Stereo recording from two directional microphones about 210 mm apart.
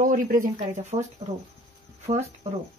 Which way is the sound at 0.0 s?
40° right (ahead or behind).